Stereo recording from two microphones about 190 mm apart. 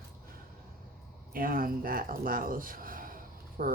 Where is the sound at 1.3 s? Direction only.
50° right (ahead or behind).